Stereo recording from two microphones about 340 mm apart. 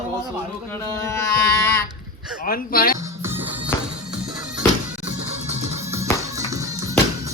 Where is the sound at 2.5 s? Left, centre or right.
Left.